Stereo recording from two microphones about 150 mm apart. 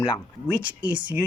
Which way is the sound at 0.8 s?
10° right (ahead or behind).